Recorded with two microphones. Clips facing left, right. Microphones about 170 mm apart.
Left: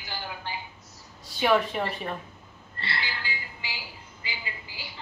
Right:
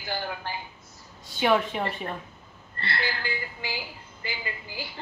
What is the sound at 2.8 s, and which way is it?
A woman's voice, 55° right (ahead or behind).